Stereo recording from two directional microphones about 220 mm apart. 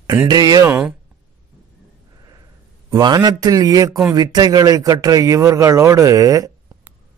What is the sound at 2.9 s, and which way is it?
A man's voice, 15° right (ahead or behind).